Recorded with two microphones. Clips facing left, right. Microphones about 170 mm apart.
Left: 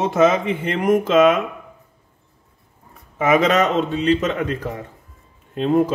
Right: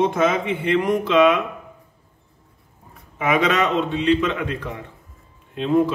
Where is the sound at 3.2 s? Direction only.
40° left (ahead or behind).